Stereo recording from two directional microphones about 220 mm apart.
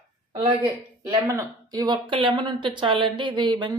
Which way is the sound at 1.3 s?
15° right (ahead or behind).